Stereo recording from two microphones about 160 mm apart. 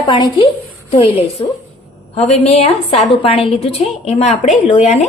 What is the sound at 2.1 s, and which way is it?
A woman's voice, 40° left (ahead or behind).